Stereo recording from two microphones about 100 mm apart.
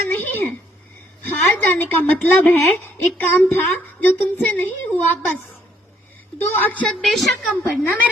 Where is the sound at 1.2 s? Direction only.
20° left (ahead or behind).